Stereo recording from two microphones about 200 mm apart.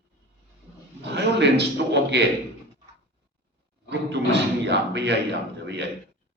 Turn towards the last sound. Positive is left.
turn(degrees=-60)  # may be behind; listen again after turning